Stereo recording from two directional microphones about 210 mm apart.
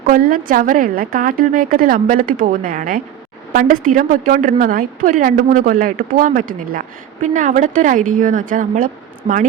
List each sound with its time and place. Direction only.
0.1 s a woman's voice: 40° right (ahead or behind)